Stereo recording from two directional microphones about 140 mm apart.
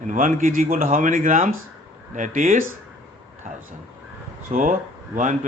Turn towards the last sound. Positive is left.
turn(degrees=-65)  # may be behind; listen again after turning